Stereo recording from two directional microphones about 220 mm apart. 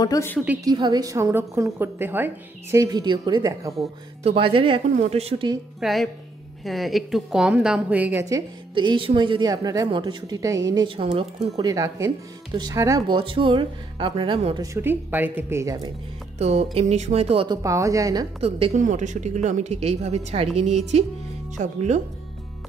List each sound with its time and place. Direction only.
0.0 s a woman's voice: 15° left (ahead or behind)
0.7 s a woman's voice: 20° right (ahead or behind)
5.8 s a woman's voice: centre (ahead or behind)
16.3 s a woman's voice: 30° right (ahead or behind)
18.4 s a woman's voice: 30° right (ahead or behind)